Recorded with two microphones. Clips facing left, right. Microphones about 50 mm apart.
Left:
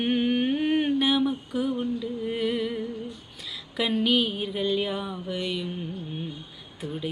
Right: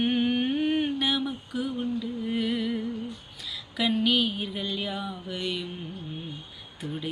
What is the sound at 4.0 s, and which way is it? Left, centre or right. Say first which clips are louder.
Music: left 1 dB; left.